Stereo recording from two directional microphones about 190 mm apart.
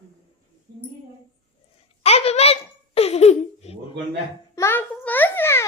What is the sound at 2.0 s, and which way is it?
Giggle, 35° left (ahead or behind).